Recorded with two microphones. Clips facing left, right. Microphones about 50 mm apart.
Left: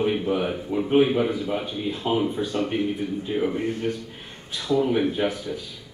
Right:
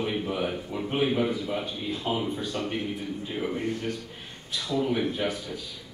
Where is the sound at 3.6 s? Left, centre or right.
Left.